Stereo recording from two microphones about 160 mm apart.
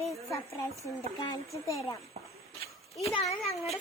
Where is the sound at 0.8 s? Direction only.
20° left (ahead or behind).